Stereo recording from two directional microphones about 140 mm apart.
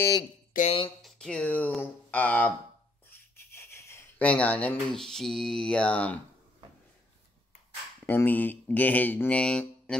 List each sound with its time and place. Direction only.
0.7 s speech: 40° left (ahead or behind)
1.0 s speech: 5° left (ahead or behind)
3.1 s a sound: 20° left (ahead or behind)
4.2 s speech: 10° left (ahead or behind)
8.1 s speech: 15° left (ahead or behind)